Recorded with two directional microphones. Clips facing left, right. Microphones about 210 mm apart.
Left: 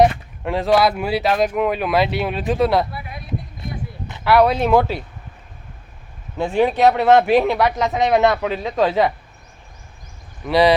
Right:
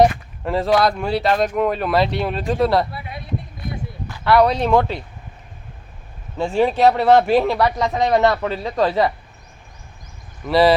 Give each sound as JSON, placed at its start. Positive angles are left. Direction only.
{"t": 0.0, "sound": "speech", "side_deg": 0}
{"t": 2.9, "sound": "speech", "side_deg": -25}
{"t": 4.2, "sound": "speech", "side_deg": 5}
{"t": 6.3, "sound": "speech", "side_deg": 0}
{"t": 10.4, "sound": "speech", "side_deg": 0}